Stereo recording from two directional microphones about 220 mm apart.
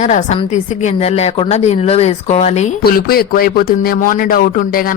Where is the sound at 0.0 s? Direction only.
35° left (ahead or behind).